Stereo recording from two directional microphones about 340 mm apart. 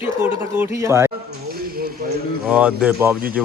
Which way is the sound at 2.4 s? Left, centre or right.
Centre.